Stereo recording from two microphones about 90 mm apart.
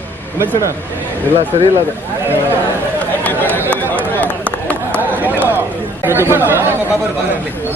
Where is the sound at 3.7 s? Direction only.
20° left (ahead or behind).